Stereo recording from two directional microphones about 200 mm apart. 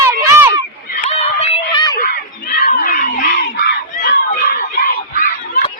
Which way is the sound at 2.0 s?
45° left (ahead or behind).